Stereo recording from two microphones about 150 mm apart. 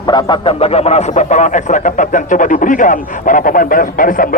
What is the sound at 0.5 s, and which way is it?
A man's voice, 45° left (ahead or behind).